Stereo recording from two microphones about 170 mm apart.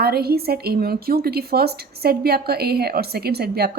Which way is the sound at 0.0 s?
65° right (ahead or behind).